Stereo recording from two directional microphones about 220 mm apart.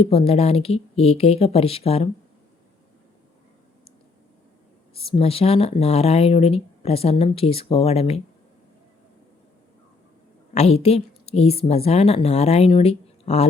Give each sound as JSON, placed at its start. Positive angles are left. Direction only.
{"t": 0.0, "sound": "speech", "side_deg": 25}
{"t": 4.9, "sound": "speech", "side_deg": 25}
{"t": 10.5, "sound": "speech", "side_deg": 30}